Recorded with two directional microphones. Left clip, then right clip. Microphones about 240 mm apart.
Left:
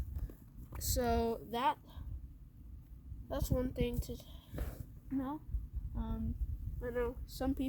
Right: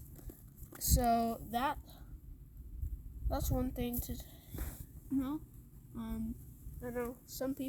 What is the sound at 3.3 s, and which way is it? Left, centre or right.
Speech, centre.